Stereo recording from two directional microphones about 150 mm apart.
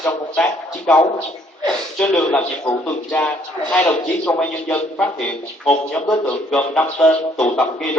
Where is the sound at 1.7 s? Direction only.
5° left (ahead or behind).